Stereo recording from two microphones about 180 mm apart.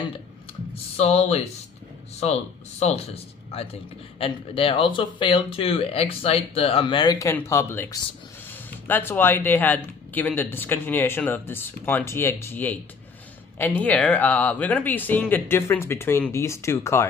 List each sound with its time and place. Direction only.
0.9 s speech: 35° left (ahead or behind)
4.2 s speech: 30° left (ahead or behind); by 17.1 s 15° left (ahead or behind)